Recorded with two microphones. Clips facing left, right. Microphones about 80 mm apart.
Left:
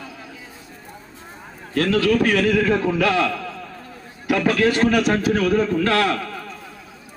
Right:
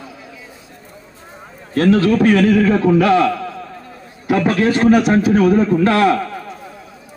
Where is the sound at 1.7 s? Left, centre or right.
Right.